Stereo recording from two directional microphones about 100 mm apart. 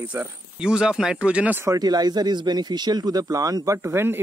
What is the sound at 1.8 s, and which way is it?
Speech, 45° right (ahead or behind).